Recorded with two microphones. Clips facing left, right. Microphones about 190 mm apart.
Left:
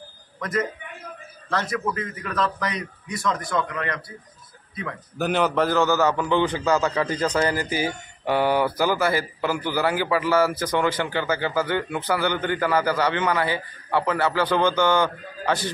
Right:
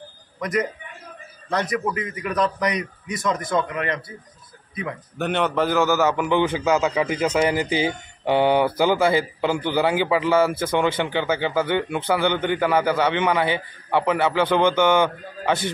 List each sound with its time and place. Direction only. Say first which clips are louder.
0.4 s a man's voice: right 2 dB; 15° right (ahead or behind)
5.1 s speech: left 1 dB; centre (ahead or behind)
5.8 s a man's voice: right 2 dB; 15° right (ahead or behind)
7.4 s speech: right 3 dB; 20° right (ahead or behind)